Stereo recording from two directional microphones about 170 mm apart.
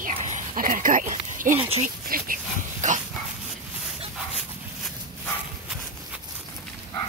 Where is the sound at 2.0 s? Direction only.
55° right (ahead or behind).